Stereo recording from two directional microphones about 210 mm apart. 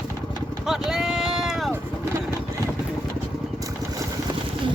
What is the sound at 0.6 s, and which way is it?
Run, centre (ahead or behind).